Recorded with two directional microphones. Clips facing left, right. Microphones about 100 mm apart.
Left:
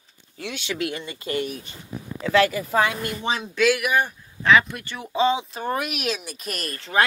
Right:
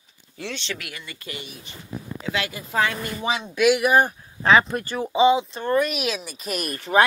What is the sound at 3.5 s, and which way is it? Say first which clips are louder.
Speech: right 2 dB; 15° right (ahead or behind).